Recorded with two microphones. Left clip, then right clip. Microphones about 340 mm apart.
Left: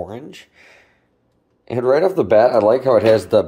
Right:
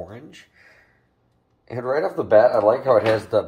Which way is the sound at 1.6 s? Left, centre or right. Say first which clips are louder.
Left 8 dB; left.